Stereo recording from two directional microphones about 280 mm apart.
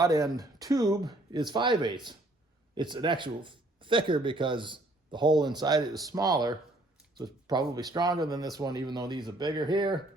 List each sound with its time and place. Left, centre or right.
0.0 s speech: centre